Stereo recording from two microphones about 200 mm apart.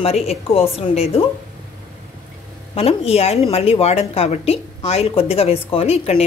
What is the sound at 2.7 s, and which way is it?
Speech, 30° left (ahead or behind).